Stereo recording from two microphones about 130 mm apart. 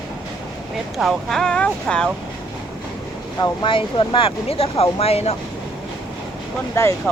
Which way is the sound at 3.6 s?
40° left (ahead or behind).